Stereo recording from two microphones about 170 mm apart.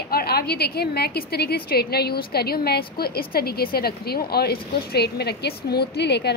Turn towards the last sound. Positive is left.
turn(degrees=80)